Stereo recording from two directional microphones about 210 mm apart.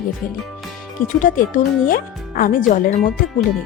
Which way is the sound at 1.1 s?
40° left (ahead or behind).